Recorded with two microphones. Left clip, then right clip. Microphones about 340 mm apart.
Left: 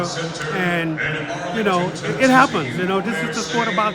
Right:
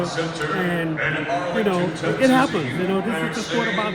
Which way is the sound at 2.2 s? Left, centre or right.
Centre.